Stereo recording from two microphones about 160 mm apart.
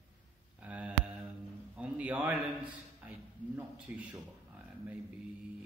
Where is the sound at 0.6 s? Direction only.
10° right (ahead or behind).